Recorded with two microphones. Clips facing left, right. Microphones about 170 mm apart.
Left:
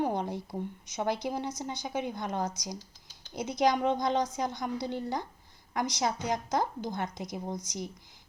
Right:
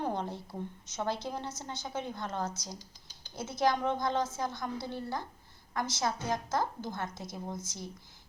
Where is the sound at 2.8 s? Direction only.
Centre (ahead or behind).